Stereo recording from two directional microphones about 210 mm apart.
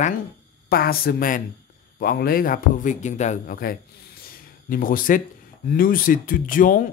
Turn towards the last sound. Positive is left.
turn(degrees=40)  # may be behind; listen again after turning